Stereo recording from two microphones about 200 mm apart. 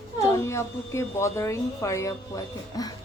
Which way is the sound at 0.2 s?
15° left (ahead or behind).